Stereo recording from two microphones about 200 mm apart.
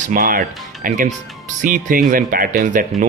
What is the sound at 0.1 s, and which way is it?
Speech, 45° right (ahead or behind).